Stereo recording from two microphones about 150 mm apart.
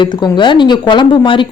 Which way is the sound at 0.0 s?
30° left (ahead or behind).